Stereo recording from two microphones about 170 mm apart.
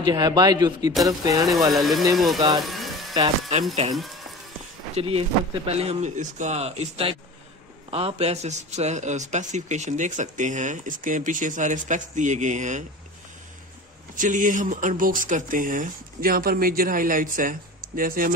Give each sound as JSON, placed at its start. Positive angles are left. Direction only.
{"t": 0.0, "sound": "speech", "side_deg": -25}
{"t": 1.7, "sound": "speech", "side_deg": 0}
{"t": 2.6, "sound": "a sound", "side_deg": 0}
{"t": 4.9, "sound": "speech", "side_deg": -35}
{"t": 14.1, "sound": "speech", "side_deg": -50}